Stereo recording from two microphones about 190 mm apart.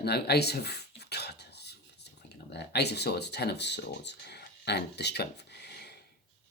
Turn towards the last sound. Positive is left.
turn(degrees=60)  # may be behind; listen again after turning